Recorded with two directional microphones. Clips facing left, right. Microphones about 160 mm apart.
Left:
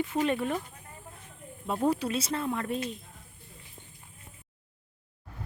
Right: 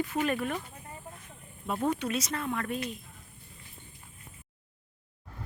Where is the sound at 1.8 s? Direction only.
35° left (ahead or behind).